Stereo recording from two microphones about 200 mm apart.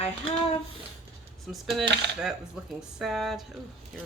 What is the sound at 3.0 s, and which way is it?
Speech, centre (ahead or behind).